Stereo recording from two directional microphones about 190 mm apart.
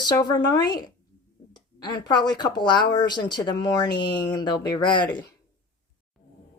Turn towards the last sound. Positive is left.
turn(degrees=25)  # may be behind; listen again after turning